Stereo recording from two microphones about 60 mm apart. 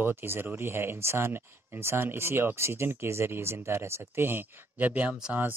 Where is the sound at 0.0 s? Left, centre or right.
Right.